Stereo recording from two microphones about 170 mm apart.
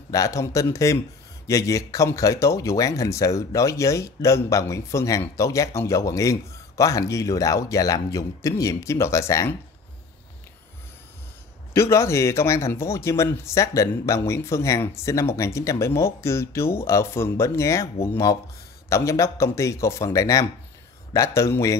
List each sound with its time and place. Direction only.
0.1 s speech: 20° left (ahead or behind)
11.7 s speech: 15° left (ahead or behind)